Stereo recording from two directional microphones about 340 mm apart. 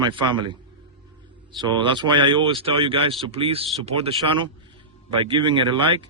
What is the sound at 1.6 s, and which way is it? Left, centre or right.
A man's voice, centre.